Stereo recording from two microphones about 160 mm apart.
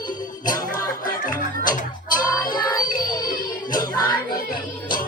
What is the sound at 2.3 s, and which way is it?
Music, 25° left (ahead or behind).